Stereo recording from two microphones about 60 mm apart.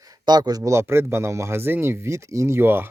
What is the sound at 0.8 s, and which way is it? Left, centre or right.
Speech, right.